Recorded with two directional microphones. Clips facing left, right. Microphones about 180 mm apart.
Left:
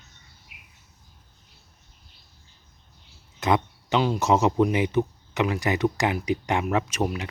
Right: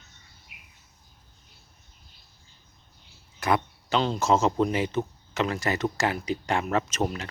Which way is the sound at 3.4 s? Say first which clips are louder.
Left 2 dB; 20° left (ahead or behind).